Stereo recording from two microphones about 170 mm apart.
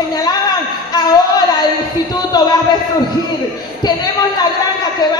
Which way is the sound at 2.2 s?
25° left (ahead or behind).